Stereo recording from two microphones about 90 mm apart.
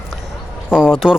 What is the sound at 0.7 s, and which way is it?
Speech, 5° right (ahead or behind).